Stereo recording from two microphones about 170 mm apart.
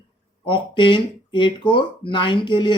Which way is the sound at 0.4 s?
30° left (ahead or behind).